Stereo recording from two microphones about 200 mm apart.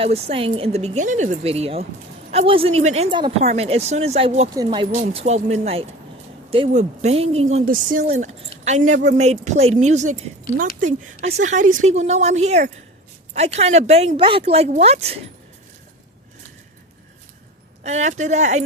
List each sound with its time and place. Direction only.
0.0 s speech: 30° right (ahead or behind)
4.9 s speech: 35° right (ahead or behind)
17.8 s speech: 35° right (ahead or behind)